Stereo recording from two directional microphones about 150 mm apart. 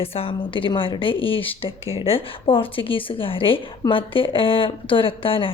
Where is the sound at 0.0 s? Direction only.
40° left (ahead or behind).